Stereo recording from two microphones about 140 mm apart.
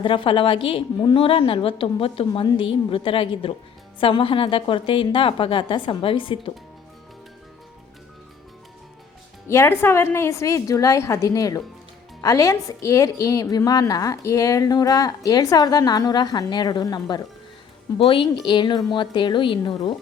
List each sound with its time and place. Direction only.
0.0 s a woman's voice: 35° left (ahead or behind)
9.5 s a woman's voice: 15° left (ahead or behind)
17.9 s a woman's voice: 40° left (ahead or behind)